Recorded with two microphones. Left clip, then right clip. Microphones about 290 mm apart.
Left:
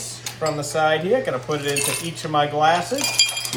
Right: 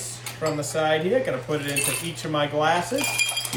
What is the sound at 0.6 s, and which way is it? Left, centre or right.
Speech, centre.